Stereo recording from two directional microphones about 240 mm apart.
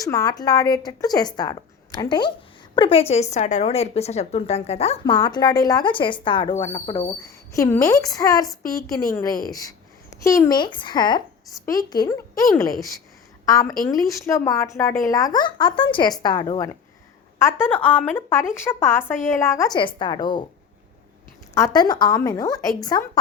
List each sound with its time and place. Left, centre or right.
0.0 s a woman's voice: centre
13.4 s a woman's voice: centre
17.4 s a woman's voice: centre
21.5 s a woman's voice: centre